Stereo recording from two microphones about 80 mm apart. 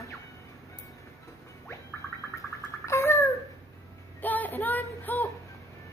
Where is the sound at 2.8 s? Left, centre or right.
Left.